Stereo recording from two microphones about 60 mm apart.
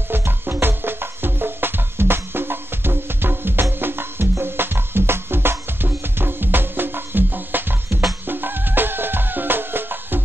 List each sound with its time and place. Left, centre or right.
0.1 s music: right